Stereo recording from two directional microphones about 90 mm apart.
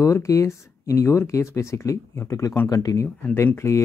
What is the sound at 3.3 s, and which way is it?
Speech, 30° left (ahead or behind).